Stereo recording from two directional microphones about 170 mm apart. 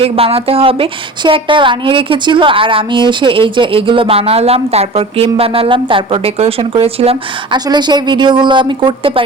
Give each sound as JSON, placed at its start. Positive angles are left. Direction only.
{"t": 0.0, "sound": "a woman's voice", "side_deg": -35}